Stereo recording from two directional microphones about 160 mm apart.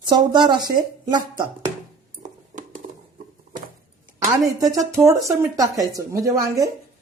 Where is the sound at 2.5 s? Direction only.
50° right (ahead or behind).